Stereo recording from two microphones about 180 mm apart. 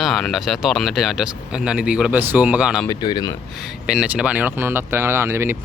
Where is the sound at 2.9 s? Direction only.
25° left (ahead or behind).